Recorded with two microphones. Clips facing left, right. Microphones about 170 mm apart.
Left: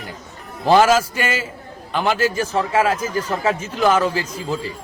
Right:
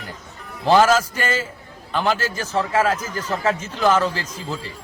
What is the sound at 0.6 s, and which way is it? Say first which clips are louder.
A man's voice: left 1 dB; 10° left (ahead or behind).